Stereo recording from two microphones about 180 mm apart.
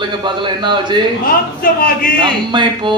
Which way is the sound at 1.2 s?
50° left (ahead or behind).